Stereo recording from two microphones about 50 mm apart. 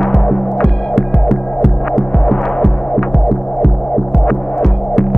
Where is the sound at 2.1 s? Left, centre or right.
Centre.